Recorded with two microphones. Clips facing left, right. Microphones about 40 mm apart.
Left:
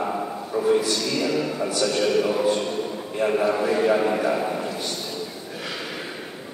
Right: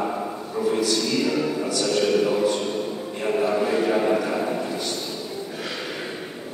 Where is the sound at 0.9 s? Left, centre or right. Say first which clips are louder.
Right 1 dB; centre.